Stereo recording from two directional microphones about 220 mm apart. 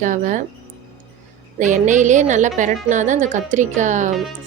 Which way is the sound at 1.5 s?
35° right (ahead or behind).